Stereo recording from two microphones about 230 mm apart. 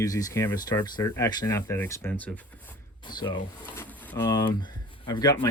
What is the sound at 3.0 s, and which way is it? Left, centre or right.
Speech, centre.